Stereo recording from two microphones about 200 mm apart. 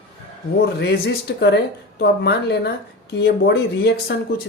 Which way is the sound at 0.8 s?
55° left (ahead or behind).